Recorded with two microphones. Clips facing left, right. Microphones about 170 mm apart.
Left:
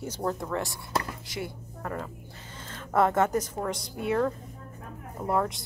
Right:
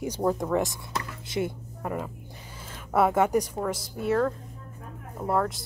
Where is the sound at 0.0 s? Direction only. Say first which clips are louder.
Right 5 dB; 10° right (ahead or behind).